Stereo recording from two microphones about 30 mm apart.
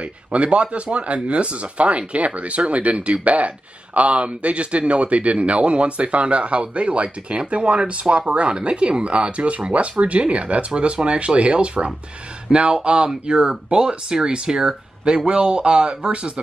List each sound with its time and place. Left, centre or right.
0.0 s speech: right
14.5 s speech: right
15.0 s speech: right